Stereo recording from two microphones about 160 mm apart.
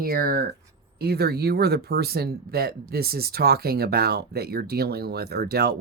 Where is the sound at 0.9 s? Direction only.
85° right.